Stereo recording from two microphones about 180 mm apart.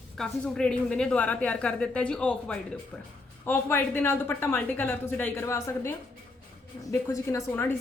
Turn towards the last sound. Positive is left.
turn(degrees=15)  # may be behind; listen again after turning